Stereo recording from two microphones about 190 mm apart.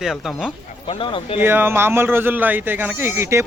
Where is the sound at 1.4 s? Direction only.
10° right (ahead or behind).